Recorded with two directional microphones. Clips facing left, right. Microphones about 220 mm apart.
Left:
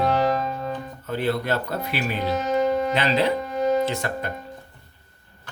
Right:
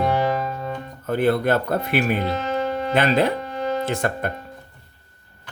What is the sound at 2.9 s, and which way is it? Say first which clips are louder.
Speech: right 2 dB; 50° right (ahead or behind).